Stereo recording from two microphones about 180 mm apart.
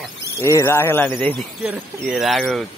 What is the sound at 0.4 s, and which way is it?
Speech, 15° left (ahead or behind).